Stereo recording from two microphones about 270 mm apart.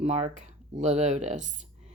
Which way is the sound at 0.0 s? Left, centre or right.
Right.